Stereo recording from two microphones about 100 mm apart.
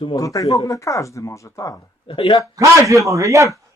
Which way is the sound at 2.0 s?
60° left (ahead or behind).